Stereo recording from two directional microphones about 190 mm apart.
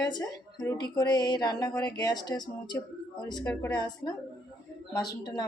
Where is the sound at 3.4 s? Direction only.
10° left (ahead or behind).